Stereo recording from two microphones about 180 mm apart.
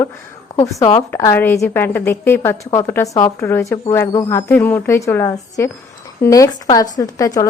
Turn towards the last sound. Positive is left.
turn(degrees=20)  # may be behind; listen again after turning